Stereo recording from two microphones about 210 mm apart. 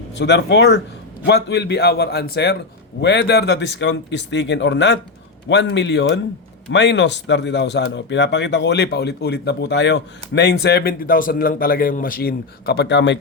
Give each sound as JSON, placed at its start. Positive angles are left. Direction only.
{"t": 0.2, "sound": "speech", "side_deg": 55}